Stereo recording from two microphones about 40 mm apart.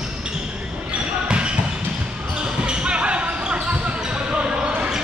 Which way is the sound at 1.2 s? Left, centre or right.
Right.